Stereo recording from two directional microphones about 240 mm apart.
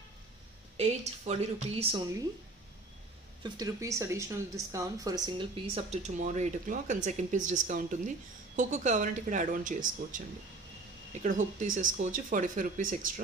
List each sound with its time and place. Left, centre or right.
0.7 s speech: right
3.4 s speech: centre; by 10.2 s right
11.2 s speech: right